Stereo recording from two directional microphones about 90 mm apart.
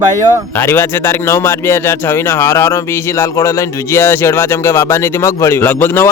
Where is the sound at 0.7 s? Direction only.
25° left (ahead or behind).